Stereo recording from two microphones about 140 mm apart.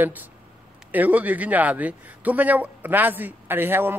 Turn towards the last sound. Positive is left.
turn(degrees=-15)  # may be behind; listen again after turning